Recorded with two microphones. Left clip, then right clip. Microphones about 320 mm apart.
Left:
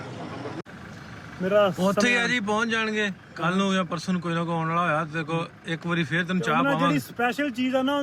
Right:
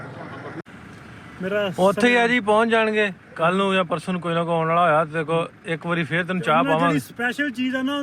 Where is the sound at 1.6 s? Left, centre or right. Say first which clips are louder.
Right 4 dB; centre.